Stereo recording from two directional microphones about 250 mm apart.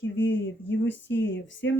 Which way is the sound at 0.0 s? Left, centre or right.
Left.